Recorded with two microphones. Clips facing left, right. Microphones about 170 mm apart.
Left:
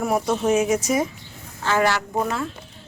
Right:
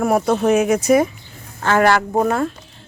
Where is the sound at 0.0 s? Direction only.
60° right (ahead or behind).